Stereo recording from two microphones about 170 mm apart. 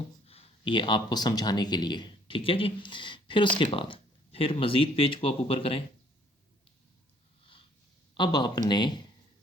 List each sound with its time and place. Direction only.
0.3 s speech: 35° left (ahead or behind)
8.1 s speech: 25° left (ahead or behind)